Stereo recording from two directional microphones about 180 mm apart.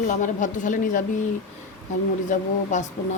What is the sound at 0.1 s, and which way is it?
Speech, 45° left (ahead or behind).